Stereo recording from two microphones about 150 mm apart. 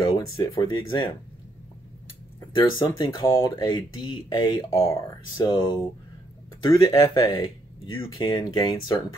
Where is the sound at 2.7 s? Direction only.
30° left (ahead or behind).